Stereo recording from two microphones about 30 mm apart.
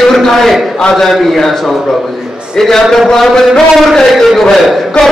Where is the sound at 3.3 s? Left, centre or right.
Centre.